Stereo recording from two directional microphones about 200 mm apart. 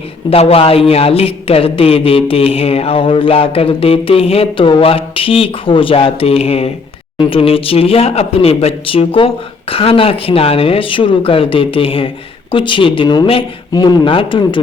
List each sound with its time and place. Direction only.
0.3 s speech: 30° left (ahead or behind)